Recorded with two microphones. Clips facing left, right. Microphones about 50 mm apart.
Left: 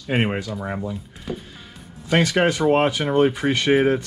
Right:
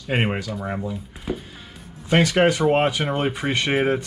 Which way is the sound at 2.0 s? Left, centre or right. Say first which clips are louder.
Right 1 dB; right.